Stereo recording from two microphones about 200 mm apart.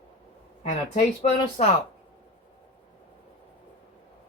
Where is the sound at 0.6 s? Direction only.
35° left (ahead or behind).